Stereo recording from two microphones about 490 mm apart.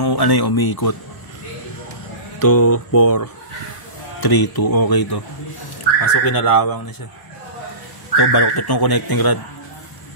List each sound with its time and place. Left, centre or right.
0.0 s speech: left
2.3 s speech: left
8.2 s speech: left